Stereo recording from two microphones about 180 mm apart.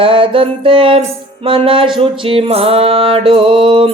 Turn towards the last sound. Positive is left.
turn(degrees=-25)  # may be behind; listen again after turning